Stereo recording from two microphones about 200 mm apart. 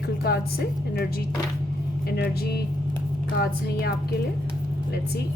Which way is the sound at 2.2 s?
55° left (ahead or behind).